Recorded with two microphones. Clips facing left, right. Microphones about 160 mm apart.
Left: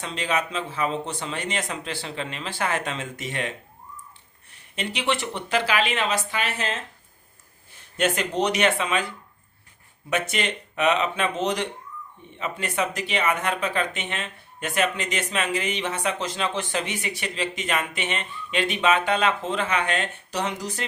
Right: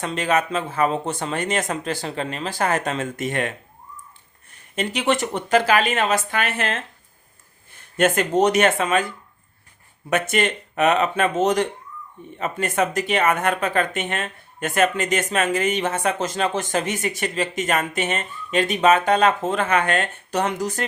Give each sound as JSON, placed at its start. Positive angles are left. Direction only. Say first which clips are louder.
{"t": 0.0, "sound": "speech", "louder": "right 5 dB", "side_deg": -50}
{"t": 4.5, "sound": "speech", "louder": "right 5 dB", "side_deg": -45}
{"t": 7.9, "sound": "speech", "louder": "right 6 dB", "side_deg": -50}
{"t": 10.1, "sound": "speech", "louder": "right 5 dB", "side_deg": -50}